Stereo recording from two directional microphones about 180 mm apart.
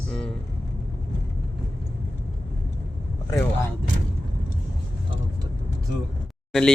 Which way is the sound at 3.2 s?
15° left (ahead or behind).